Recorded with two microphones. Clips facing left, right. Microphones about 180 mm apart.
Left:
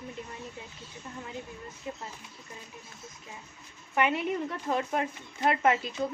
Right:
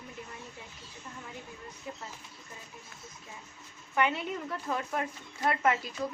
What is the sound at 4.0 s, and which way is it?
Speech, 20° left (ahead or behind).